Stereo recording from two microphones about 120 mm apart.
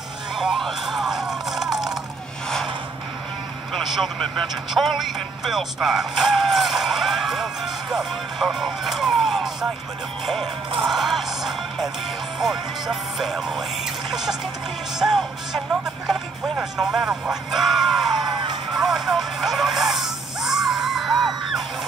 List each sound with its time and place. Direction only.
0.4 s music: centre (ahead or behind)
3.7 s speech: centre (ahead or behind)
10.9 s music: centre (ahead or behind)
12.4 s speech: 5° right (ahead or behind)
15.0 s music: 5° right (ahead or behind)
16.5 s speech: 5° right (ahead or behind)
18.2 s music: 40° right (ahead or behind)
18.8 s music: centre (ahead or behind)